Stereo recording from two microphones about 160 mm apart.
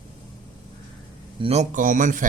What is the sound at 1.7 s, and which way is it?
Speech, 50° right (ahead or behind).